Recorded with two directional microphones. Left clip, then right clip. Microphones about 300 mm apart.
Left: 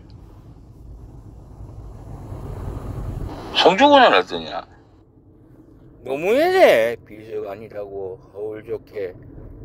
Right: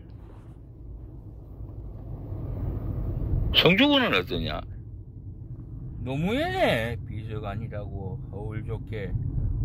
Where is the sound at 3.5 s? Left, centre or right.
Right.